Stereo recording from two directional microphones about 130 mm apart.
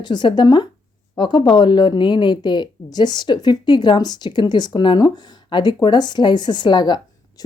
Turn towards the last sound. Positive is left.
turn(degrees=35)  # may be behind; listen again after turning